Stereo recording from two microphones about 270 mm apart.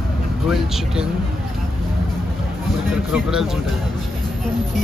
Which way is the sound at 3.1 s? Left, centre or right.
Centre.